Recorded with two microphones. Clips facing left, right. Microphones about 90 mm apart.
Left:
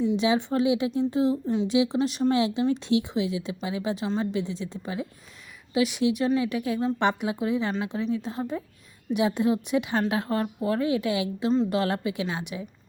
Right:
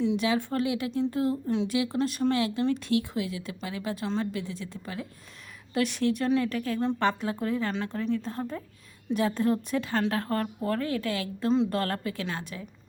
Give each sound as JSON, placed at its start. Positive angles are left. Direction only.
{"t": 0.2, "sound": "speech", "side_deg": 25}
{"t": 1.6, "sound": "speech", "side_deg": 25}
{"t": 4.3, "sound": "speech", "side_deg": 25}
{"t": 5.7, "sound": "speech", "side_deg": 10}